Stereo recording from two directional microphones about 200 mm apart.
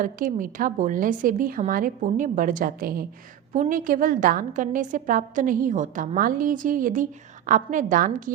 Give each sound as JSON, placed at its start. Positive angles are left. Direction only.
{"t": 0.0, "sound": "a woman's voice", "side_deg": -40}